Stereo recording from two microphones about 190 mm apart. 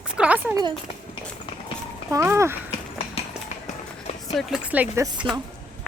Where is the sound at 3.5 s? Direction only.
40° left (ahead or behind).